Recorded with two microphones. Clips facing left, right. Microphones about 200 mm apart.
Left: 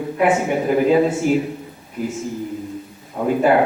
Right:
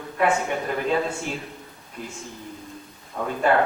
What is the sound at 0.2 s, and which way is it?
A man's voice, 15° left (ahead or behind).